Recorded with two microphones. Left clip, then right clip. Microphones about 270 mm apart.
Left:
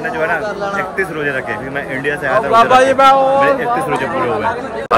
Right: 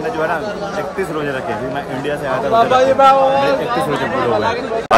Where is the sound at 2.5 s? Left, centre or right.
Left.